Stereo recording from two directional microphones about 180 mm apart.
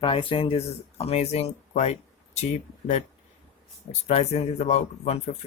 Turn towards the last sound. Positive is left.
turn(degrees=35)  # may be behind; listen again after turning